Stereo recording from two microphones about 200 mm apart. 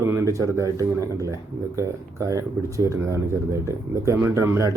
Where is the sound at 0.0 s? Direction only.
15° right (ahead or behind).